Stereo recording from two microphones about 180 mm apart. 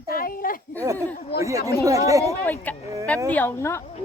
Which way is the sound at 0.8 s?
15° right (ahead or behind).